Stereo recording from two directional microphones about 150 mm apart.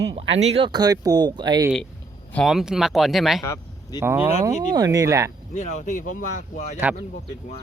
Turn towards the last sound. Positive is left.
turn(degrees=50)  # may be behind; listen again after turning